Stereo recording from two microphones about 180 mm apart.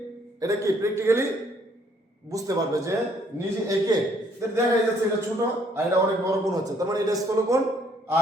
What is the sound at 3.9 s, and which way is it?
Speech, 20° right (ahead or behind).